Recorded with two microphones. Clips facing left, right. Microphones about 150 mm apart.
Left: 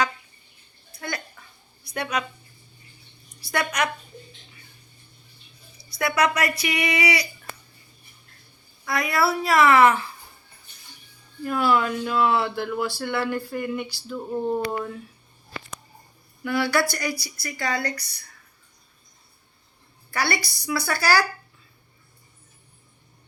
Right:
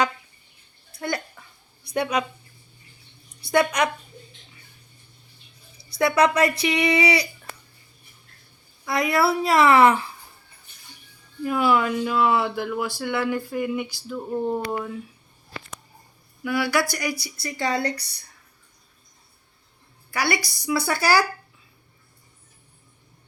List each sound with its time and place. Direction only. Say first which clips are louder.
1.9 s speech: right 4 dB; 25° right (ahead or behind)
3.4 s speech: right 5 dB; 25° right (ahead or behind)
6.1 s speech: right 3 dB; 30° right (ahead or behind)
8.9 s speech: right 2 dB; 25° right (ahead or behind)
11.4 s speech: right 1 dB; 15° right (ahead or behind)
16.4 s speech: even; 10° right (ahead or behind); by 18.0 s 30° right (ahead or behind)
20.1 s speech: right 1 dB; 15° right (ahead or behind)